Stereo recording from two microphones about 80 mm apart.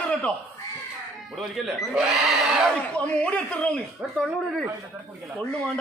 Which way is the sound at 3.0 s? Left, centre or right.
Centre.